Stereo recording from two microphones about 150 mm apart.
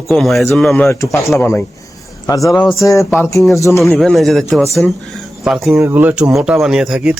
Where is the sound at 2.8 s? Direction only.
20° left (ahead or behind).